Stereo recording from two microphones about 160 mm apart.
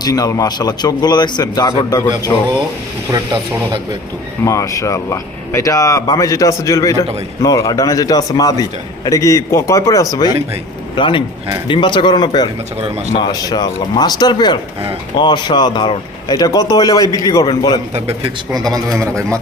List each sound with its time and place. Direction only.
0.0 s a man's voice: 25° left (ahead or behind)
4.4 s a man's voice: 20° left (ahead or behind)
18.5 s speech: 25° right (ahead or behind)